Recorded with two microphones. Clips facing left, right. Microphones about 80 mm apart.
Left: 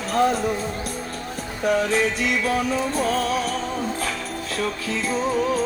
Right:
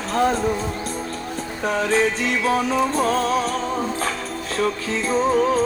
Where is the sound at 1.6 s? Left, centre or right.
Right.